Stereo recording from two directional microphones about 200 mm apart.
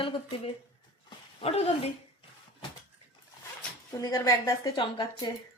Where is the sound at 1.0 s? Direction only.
30° left (ahead or behind).